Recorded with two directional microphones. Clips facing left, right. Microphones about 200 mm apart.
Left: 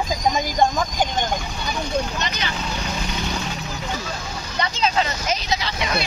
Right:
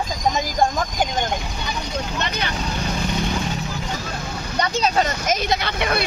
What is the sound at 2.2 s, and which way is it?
Speech, 55° right (ahead or behind).